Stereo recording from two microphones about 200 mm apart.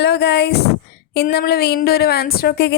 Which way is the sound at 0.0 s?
55° left (ahead or behind).